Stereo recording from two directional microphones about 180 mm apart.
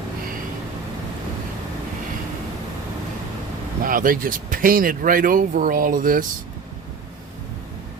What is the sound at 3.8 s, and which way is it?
Speech, 50° right (ahead or behind).